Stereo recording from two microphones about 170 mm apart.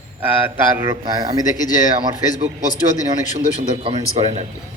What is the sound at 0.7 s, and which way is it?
Speech, 15° right (ahead or behind).